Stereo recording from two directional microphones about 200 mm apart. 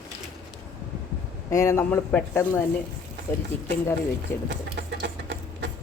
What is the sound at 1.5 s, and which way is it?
Speech, 15° left (ahead or behind).